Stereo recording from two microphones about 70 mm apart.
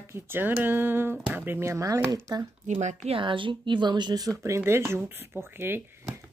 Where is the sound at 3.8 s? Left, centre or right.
Right.